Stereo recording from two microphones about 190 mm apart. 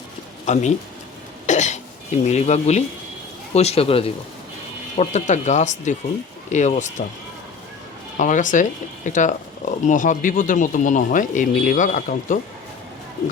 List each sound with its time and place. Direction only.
0.4 s speech: 40° left (ahead or behind)
1.5 s cough: 40° left (ahead or behind)
2.2 s speech: 35° left (ahead or behind)
8.2 s speech: 40° left (ahead or behind)